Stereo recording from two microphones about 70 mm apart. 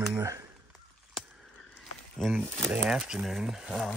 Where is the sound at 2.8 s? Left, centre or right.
Centre.